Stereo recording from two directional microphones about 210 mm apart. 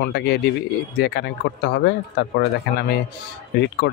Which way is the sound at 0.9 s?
50° left (ahead or behind).